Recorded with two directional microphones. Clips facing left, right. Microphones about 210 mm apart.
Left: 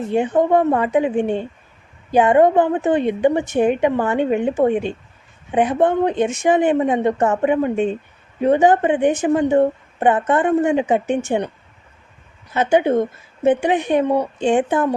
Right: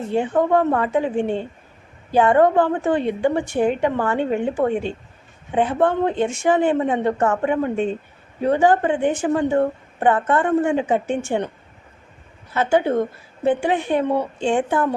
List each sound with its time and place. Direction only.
0.1 s a woman's voice: 20° left (ahead or behind)
12.5 s speech: 20° left (ahead or behind)